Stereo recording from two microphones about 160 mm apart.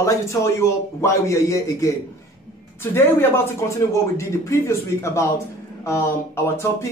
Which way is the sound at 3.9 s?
20° left (ahead or behind).